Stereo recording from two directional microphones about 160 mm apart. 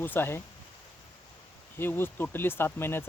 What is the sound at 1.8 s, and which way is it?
Speech, 15° left (ahead or behind).